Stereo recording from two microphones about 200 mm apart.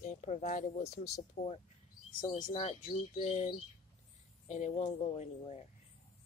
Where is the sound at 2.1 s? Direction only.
25° left (ahead or behind).